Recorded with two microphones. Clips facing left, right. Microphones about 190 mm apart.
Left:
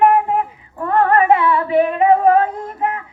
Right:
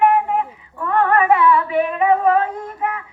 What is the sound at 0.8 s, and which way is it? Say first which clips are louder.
Female singing: left 2 dB; 35° left (ahead or behind).